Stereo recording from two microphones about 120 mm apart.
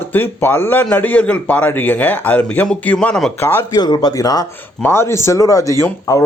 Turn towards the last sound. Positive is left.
turn(degrees=25)  # may be behind; listen again after turning